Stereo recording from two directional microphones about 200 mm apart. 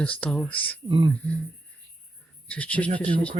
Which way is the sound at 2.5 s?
5° left (ahead or behind).